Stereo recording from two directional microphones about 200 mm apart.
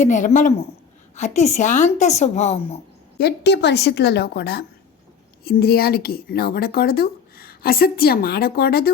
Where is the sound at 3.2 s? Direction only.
55° left (ahead or behind).